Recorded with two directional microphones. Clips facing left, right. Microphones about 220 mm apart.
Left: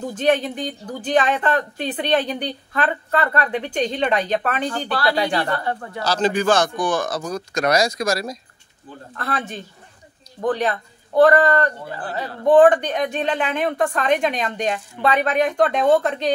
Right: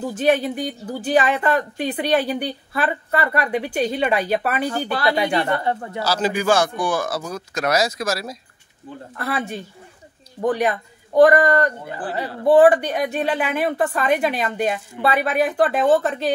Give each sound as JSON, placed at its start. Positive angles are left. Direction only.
{"t": 0.0, "sound": "speech", "side_deg": -10}
{"t": 4.9, "sound": "speech", "side_deg": -20}
{"t": 6.0, "sound": "speech", "side_deg": -5}